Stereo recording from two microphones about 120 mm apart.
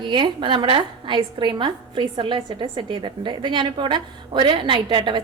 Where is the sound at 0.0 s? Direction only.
40° right (ahead or behind).